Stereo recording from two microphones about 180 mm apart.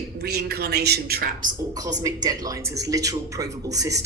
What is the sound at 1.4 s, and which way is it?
A man's voice, 20° right (ahead or behind).